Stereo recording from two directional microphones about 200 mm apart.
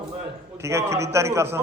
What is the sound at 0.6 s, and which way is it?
Speech, 15° right (ahead or behind).